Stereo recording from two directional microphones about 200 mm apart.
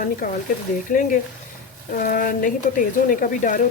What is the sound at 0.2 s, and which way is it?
Speech, 45° left (ahead or behind).